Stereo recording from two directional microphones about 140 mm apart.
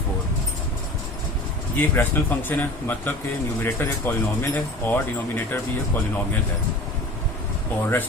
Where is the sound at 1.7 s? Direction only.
15° left (ahead or behind).